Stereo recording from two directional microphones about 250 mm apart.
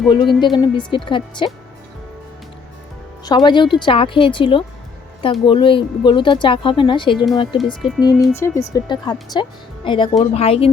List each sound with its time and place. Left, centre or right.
0.1 s speech: centre
3.2 s speech: centre
7.6 s speech: centre
8.4 s speech: centre